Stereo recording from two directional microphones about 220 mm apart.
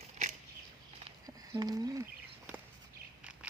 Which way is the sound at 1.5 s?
15° right (ahead or behind).